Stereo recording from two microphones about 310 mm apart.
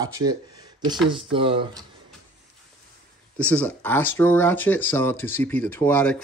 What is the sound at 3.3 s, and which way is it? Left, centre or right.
Speech, centre.